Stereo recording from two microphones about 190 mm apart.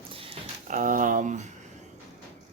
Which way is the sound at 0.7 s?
45° right (ahead or behind).